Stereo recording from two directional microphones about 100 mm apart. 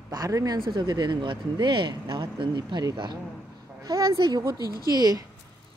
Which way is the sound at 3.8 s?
35° right (ahead or behind).